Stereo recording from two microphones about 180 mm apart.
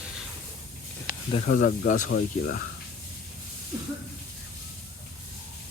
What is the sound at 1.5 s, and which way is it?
Speech, 45° left (ahead or behind).